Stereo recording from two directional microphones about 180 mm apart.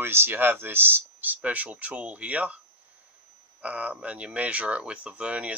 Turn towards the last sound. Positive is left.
turn(degrees=-5)  # may be behind; listen again after turning